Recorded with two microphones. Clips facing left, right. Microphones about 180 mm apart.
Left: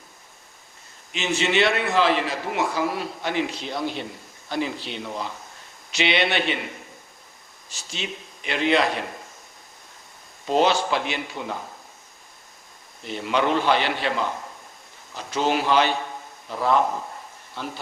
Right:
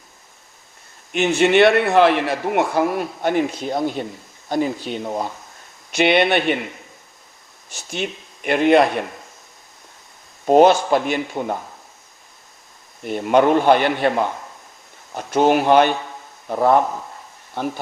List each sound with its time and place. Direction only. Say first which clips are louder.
1.1 s a man's voice: right 8 dB; 55° right (ahead or behind)
7.7 s a man's voice: right 7 dB; 55° right (ahead or behind)
10.4 s a man's voice: right 8 dB; 50° right (ahead or behind)
13.0 s a man's voice: right 8 dB; 55° right (ahead or behind)